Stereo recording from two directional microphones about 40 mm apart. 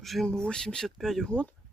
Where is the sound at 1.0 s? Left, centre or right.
Centre.